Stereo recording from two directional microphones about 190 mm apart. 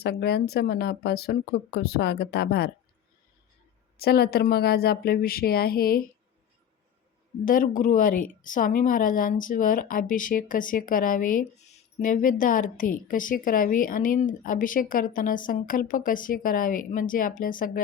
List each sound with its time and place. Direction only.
0.0 s speech: 60° left (ahead or behind)
3.9 s a woman's voice: 55° left (ahead or behind)
7.4 s a woman's voice: 45° left (ahead or behind)